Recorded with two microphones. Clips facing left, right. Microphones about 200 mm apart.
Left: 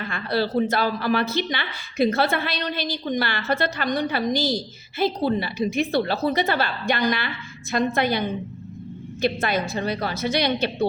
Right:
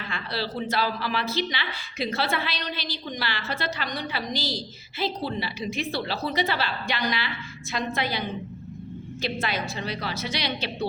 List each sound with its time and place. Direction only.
0.0 s a woman's voice: 50° left (ahead or behind)
9.2 s a woman's voice: 50° left (ahead or behind)